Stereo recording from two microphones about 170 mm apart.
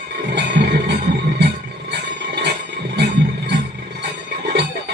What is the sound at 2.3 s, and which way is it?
Music, 85° right.